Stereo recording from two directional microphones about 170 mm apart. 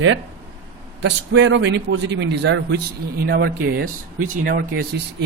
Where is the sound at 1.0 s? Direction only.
90° right; by 4.6 s 55° right (ahead or behind).